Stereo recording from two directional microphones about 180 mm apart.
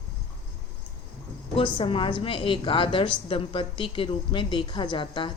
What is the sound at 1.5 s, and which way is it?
Speech, 30° left (ahead or behind).